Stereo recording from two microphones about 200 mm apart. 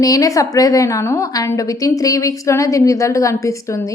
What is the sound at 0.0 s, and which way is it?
A woman's voice, 20° left (ahead or behind).